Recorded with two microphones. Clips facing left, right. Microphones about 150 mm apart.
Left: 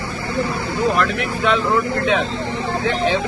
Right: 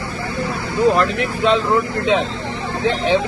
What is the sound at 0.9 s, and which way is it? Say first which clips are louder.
Speech: right 2 dB; 30° right (ahead or behind).